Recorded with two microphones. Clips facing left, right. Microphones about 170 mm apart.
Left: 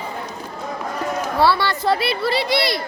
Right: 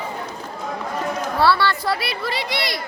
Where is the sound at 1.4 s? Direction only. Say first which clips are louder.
Even; 15° left (ahead or behind); by 2.8 s 30° left (ahead or behind).